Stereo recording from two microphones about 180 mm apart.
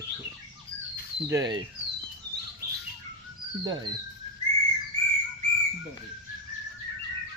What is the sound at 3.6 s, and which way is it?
Fowl, 25° right (ahead or behind).